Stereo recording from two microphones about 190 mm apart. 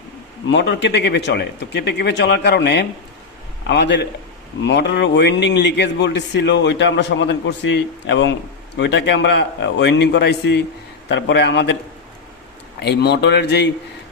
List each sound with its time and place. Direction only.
0.4 s a man's voice: 65° left (ahead or behind)
12.8 s speech: 60° left (ahead or behind)